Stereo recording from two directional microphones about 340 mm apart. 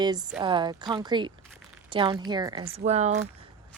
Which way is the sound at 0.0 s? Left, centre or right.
Centre.